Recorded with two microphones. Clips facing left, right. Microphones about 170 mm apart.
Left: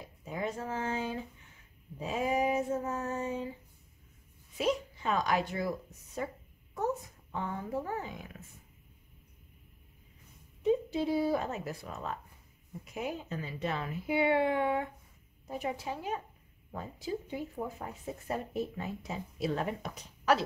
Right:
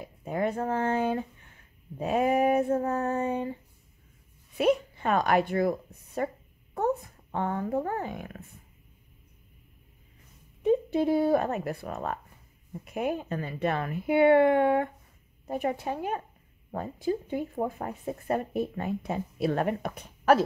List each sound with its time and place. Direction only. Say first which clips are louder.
0.0 s speech: right 7 dB; 60° right (ahead or behind)
4.6 s a woman's voice: right 7 dB; 60° right (ahead or behind)
10.6 s speech: right 5 dB; 55° right (ahead or behind)